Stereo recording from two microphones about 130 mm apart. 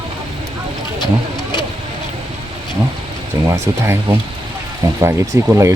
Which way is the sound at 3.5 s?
20° right (ahead or behind).